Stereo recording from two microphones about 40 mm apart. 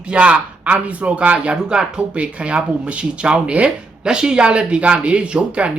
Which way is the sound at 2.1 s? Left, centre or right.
Right.